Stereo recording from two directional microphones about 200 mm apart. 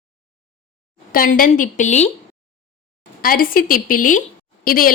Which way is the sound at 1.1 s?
45° left (ahead or behind).